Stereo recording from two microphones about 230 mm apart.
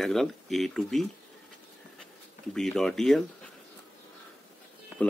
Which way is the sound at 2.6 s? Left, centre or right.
Centre.